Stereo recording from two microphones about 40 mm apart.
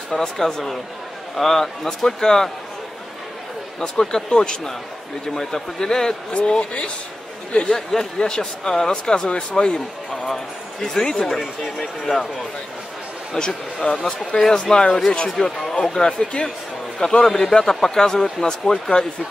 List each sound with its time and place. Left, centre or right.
0.2 s a man's voice: centre
3.8 s a man's voice: centre
6.3 s speech: left
7.7 s a man's voice: centre
10.3 s a man's voice: centre
11.3 s speech: centre
13.4 s speech: centre
14.0 s a man's voice: left
17.3 s a man's voice: centre